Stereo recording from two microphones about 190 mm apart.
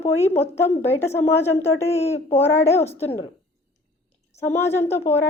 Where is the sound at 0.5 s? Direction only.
15° left (ahead or behind).